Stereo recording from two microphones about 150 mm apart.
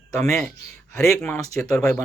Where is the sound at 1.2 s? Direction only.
15° left (ahead or behind).